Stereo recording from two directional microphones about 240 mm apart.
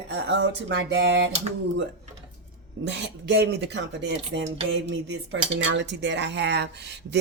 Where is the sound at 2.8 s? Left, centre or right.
Right.